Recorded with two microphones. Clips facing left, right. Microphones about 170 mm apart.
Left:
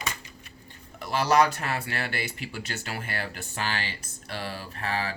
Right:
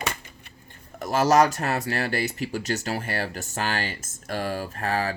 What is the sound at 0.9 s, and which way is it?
Speech, 45° right (ahead or behind).